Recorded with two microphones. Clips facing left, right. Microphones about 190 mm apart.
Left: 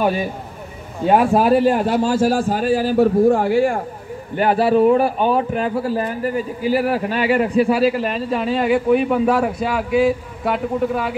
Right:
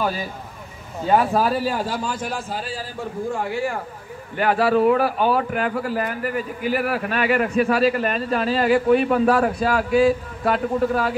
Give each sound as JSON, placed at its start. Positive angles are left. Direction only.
{"t": 1.0, "sound": "a man's voice", "side_deg": 25}
{"t": 1.5, "sound": "speech", "side_deg": 60}
{"t": 2.0, "sound": "a man's voice", "side_deg": 30}
{"t": 2.6, "sound": "speech", "side_deg": 65}
{"t": 4.4, "sound": "a man's voice", "side_deg": 30}
{"t": 10.0, "sound": "a man's voice", "side_deg": 5}